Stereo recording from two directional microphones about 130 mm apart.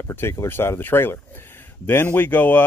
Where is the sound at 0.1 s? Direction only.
20° left (ahead or behind).